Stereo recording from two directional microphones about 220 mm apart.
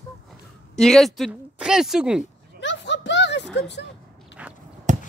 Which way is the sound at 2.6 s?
55° left (ahead or behind).